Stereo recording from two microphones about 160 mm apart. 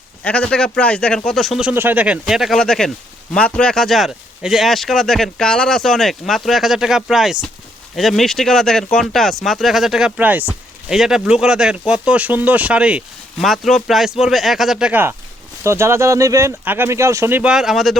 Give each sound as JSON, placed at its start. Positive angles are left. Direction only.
{"t": 0.2, "sound": "speech", "side_deg": 5}
{"t": 1.7, "sound": "speech", "side_deg": -10}